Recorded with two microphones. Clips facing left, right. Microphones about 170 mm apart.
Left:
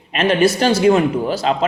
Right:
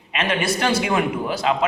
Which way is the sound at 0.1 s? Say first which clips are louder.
Left 8 dB; 35° left (ahead or behind).